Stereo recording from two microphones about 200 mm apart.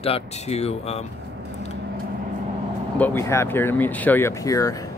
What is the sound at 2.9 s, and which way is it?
Speech, 10° left (ahead or behind).